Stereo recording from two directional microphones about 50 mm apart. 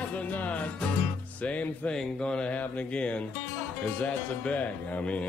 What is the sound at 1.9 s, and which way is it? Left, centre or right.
Speech, centre.